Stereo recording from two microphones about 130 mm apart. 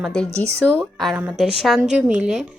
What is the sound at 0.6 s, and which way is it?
A woman's voice, 15° right (ahead or behind).